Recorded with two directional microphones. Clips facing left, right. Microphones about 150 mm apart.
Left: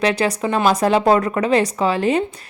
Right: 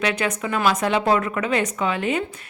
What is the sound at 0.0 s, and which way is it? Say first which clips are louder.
A woman's voice: left 5 dB; 35° left (ahead or behind).